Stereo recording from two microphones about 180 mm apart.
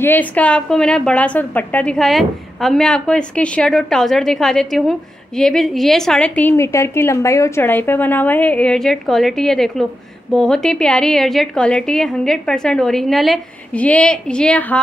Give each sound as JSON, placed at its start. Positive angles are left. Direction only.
{"t": 0.0, "sound": "a woman's voice", "side_deg": 10}